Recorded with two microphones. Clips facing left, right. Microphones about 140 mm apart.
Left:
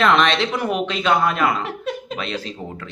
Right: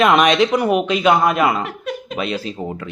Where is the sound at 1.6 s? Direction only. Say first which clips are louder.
Even; 30° left (ahead or behind).